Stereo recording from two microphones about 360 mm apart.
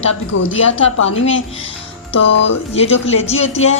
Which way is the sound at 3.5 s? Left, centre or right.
Centre.